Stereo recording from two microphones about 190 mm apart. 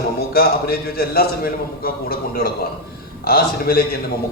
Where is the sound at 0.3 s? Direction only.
55° left (ahead or behind).